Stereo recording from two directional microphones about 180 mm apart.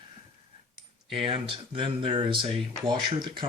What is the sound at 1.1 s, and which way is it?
Speech, 30° right (ahead or behind).